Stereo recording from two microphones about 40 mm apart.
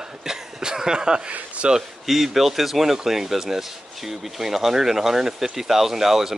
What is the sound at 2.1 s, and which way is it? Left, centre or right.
Speech, centre.